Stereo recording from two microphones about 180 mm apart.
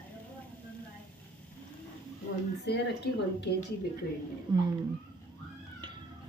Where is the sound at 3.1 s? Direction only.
65° left (ahead or behind).